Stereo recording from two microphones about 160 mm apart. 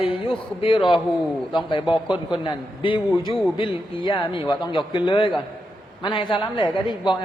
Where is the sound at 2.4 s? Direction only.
30° left (ahead or behind).